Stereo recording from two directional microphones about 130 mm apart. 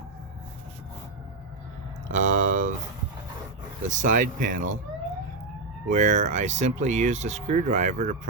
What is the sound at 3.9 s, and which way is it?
Speech, 75° right (ahead or behind).